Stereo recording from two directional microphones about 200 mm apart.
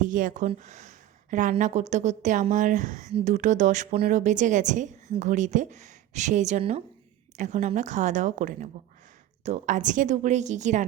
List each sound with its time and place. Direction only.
0.0 s speech: 40° right (ahead or behind)